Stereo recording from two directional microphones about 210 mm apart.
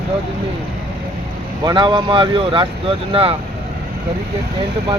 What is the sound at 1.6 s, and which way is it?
Speech, 20° right (ahead or behind).